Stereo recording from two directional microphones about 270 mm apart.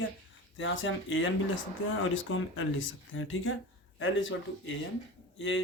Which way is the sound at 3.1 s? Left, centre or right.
Left.